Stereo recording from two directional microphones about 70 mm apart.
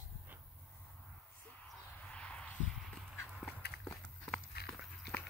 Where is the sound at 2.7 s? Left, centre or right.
Centre.